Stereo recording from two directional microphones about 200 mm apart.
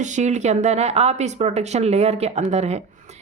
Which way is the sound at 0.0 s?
35° right (ahead or behind).